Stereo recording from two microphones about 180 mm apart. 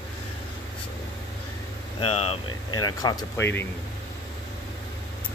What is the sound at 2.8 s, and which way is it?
Speech, 20° left (ahead or behind).